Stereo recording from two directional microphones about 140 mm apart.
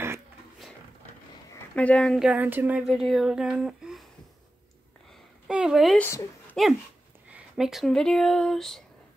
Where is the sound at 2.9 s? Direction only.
Centre (ahead or behind).